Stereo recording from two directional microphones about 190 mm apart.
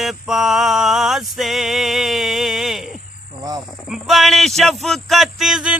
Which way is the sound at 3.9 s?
Centre (ahead or behind).